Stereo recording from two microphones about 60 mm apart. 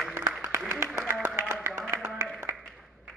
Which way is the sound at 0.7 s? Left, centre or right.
Right.